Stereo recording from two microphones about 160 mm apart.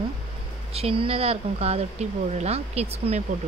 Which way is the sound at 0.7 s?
35° right (ahead or behind).